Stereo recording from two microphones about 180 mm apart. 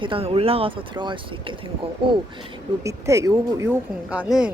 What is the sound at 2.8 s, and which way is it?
Speech, 15° right (ahead or behind).